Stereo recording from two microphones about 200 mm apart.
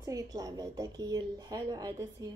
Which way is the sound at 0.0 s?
15° right (ahead or behind).